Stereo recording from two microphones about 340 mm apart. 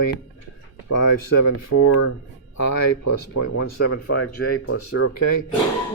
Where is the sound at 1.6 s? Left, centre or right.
Left.